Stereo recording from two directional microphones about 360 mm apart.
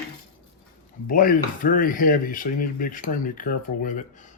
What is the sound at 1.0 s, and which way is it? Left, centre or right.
Speech, left.